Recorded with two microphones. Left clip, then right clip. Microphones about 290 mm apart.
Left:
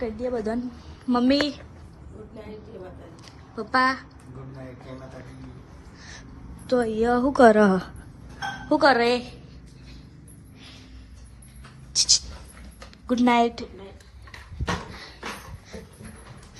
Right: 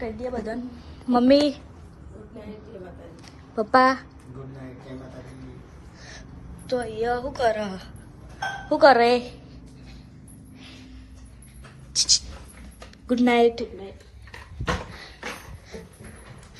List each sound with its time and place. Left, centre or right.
0.0 s a woman's voice: centre
6.0 s a sound: centre
6.7 s a woman's voice: left
8.7 s a woman's voice: centre
11.9 s a woman's voice: centre